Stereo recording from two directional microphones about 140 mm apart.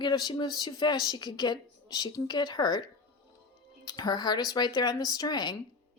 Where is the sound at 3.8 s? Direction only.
30° left (ahead or behind).